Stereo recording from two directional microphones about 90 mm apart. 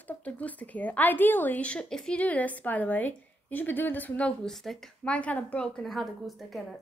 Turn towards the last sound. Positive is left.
turn(degrees=0)  # may be behind; listen again after turning